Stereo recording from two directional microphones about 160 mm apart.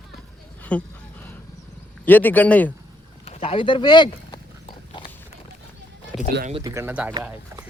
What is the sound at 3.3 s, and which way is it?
Biting, 40° left (ahead or behind).